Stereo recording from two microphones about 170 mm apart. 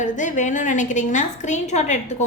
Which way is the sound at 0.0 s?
50° left (ahead or behind).